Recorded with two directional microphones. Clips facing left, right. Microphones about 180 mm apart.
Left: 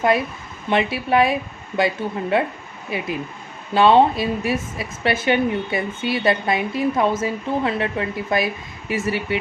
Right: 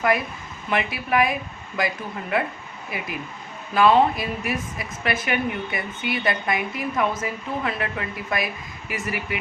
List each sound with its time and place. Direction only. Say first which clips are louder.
0.7 s a woman's voice: left 5 dB; 25° left (ahead or behind)